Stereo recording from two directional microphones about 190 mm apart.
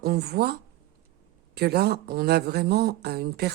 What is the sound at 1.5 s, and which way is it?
Speech, 55° right (ahead or behind).